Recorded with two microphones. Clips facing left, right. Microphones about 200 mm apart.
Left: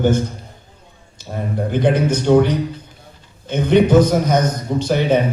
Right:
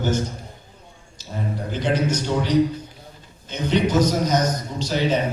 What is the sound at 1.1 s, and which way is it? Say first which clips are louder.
A man's voice: left 5 dB; 55° left (ahead or behind).